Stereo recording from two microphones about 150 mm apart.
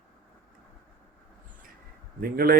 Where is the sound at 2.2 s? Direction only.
80° right.